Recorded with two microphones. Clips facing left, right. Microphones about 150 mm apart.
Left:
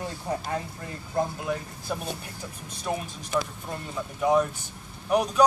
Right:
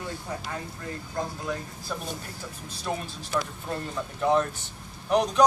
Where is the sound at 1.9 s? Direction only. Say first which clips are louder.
Left 2 dB; 10° left (ahead or behind).